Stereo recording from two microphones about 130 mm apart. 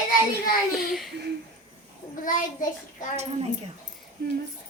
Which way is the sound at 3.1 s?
55° right (ahead or behind).